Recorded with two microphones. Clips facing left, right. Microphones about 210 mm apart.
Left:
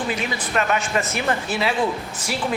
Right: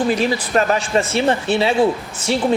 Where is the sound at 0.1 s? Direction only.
35° right (ahead or behind).